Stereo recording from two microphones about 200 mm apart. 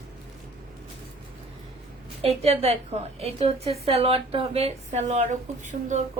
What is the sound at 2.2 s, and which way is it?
A woman's voice, 30° right (ahead or behind).